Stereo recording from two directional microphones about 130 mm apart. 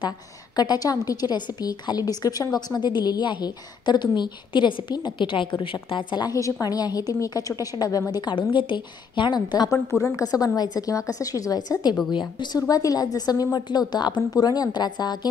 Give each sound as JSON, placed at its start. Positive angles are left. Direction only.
{"t": 0.6, "sound": "a woman's voice", "side_deg": 30}